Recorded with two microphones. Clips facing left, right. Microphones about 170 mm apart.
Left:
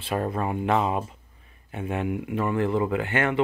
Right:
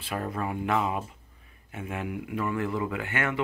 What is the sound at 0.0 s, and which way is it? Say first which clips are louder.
Speech: left 5 dB; 30° left (ahead or behind).